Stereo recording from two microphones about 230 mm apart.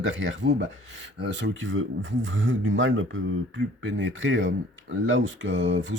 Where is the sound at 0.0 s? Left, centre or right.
Right.